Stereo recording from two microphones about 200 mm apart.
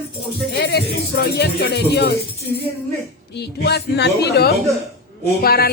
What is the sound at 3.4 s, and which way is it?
Speech, 55° left (ahead or behind).